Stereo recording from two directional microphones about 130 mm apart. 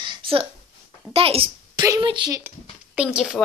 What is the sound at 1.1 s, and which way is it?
Speech, 45° right (ahead or behind).